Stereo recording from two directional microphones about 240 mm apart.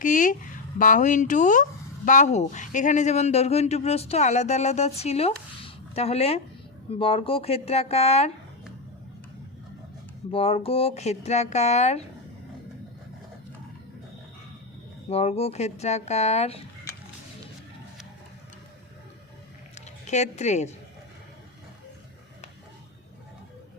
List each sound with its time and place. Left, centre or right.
0.0 s speech: left
10.3 s speech: left
15.1 s speech: left
19.7 s a sound: left